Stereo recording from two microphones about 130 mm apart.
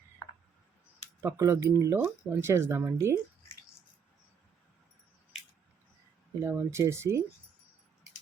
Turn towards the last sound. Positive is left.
turn(degrees=-20)  # may be behind; listen again after turning